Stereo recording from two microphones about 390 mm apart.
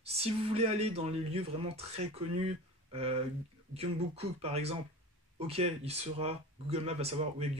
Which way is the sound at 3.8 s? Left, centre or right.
Centre.